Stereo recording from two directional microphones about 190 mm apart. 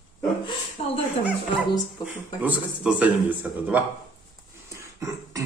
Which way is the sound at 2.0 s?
5° right (ahead or behind).